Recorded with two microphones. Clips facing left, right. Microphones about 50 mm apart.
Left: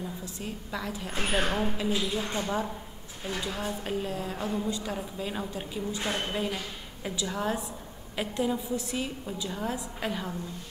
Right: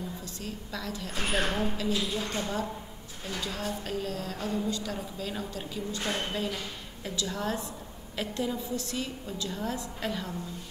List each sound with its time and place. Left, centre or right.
0.2 s a woman's voice: centre